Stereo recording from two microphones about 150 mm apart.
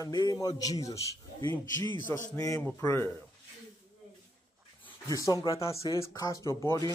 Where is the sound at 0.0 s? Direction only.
25° left (ahead or behind).